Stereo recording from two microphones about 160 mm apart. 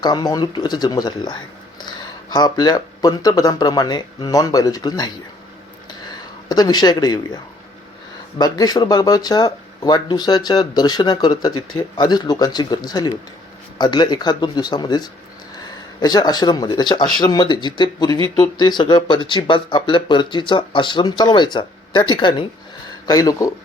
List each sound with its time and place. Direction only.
0.0 s speech: 25° left (ahead or behind)
8.4 s speech: 25° left (ahead or behind)